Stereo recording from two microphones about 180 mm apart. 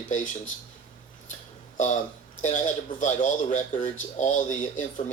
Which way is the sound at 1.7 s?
45° left (ahead or behind).